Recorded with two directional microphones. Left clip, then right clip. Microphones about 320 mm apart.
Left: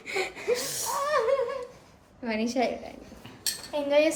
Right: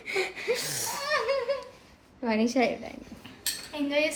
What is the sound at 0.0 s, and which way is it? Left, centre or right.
Snort, centre.